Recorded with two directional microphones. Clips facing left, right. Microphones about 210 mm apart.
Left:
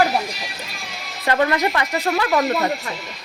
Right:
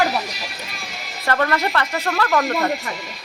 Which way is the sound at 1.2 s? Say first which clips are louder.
Left 2 dB; 15° left (ahead or behind).